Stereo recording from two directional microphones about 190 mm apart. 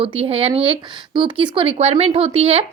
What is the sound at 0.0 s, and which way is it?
A woman's voice, 30° right (ahead or behind).